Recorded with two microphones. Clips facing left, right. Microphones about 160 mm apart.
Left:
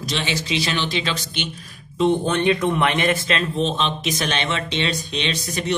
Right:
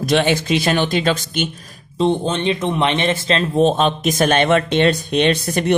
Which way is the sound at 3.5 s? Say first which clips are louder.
Right 8 dB; 50° right (ahead or behind).